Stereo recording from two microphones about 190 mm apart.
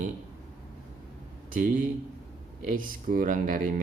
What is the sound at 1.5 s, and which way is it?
Speech, 45° right (ahead or behind).